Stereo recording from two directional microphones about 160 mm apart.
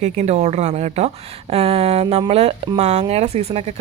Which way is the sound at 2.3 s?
40° right (ahead or behind).